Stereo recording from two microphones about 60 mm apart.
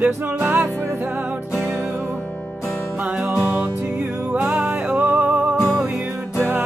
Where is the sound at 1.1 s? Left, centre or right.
Right.